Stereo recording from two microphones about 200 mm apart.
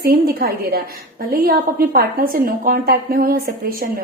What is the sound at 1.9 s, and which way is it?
A woman's voice, 45° right (ahead or behind).